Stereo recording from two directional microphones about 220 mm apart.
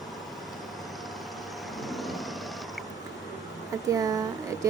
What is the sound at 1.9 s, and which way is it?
Vehicle, centre (ahead or behind).